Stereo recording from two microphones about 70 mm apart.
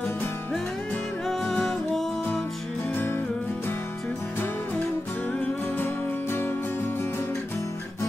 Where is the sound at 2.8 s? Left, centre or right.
Left.